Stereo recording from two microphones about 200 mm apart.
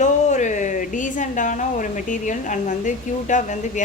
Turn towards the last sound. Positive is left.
turn(degrees=40)  # may be behind; listen again after turning